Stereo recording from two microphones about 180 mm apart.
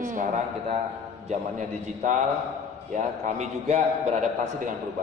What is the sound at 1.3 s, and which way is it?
A man's voice, 40° right (ahead or behind).